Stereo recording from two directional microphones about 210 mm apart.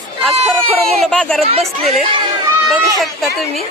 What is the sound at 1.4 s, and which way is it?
Speech, 30° right (ahead or behind).